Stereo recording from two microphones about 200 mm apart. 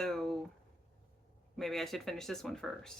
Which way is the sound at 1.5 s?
Centre (ahead or behind).